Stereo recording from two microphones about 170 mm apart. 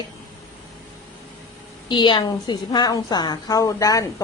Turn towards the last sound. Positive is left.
turn(degrees=20)  # may be behind; listen again after turning